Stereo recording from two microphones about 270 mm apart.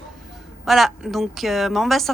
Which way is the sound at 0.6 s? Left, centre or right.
Centre.